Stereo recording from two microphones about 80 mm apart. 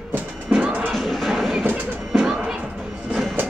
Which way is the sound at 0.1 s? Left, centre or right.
Centre.